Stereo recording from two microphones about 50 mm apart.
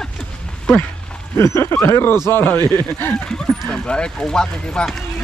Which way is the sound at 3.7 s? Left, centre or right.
Centre.